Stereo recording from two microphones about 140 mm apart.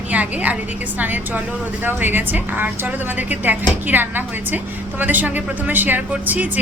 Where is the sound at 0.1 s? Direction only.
10° right (ahead or behind).